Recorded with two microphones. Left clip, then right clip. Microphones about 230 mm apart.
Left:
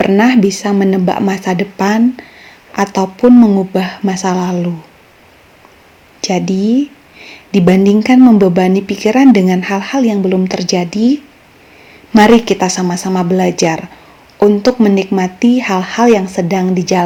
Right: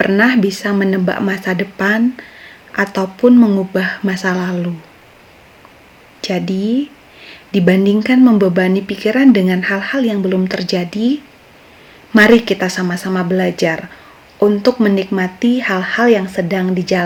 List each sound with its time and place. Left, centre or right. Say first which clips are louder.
0.0 s speech: left 2 dB; centre
6.2 s speech: left 4 dB; centre